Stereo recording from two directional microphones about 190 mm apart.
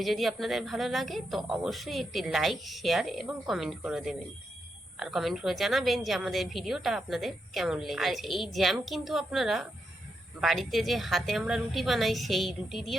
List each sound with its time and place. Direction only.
0.0 s a woman's voice: centre (ahead or behind)